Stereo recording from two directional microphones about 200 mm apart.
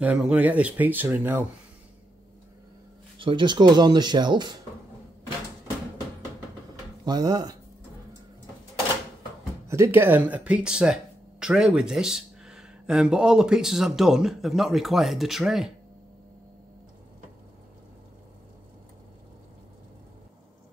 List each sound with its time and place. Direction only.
0.0 s speech: 5° right (ahead or behind)
3.2 s speech: 25° right (ahead or behind)
7.1 s speech: 20° right (ahead or behind)
9.7 s speech: 10° right (ahead or behind)